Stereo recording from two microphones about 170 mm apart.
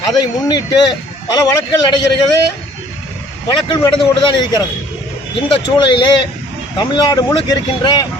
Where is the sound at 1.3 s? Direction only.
20° left (ahead or behind).